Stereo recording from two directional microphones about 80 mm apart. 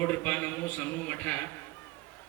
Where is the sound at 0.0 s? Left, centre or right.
Left.